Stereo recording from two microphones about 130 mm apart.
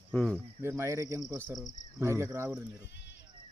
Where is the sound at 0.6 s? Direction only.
20° right (ahead or behind).